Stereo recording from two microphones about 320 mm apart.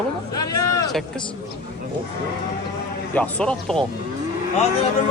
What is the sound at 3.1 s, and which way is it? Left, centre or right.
Speech, centre.